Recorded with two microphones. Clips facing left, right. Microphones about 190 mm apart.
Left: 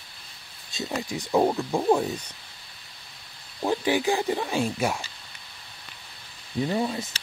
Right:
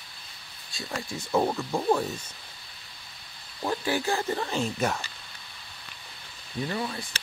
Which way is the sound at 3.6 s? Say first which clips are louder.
Left 4 dB; 15° left (ahead or behind).